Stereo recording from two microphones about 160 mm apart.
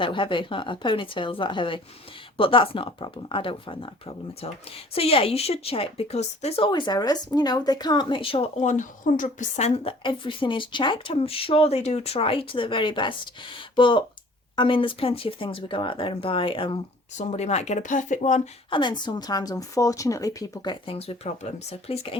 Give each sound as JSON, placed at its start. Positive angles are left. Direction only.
{"t": 0.0, "sound": "speech", "side_deg": 30}
{"t": 17.2, "sound": "speech", "side_deg": 45}
{"t": 18.7, "sound": "a woman's voice", "side_deg": 30}